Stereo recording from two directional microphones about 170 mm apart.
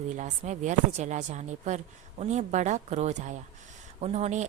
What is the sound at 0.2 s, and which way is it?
A woman's voice, 45° right (ahead or behind).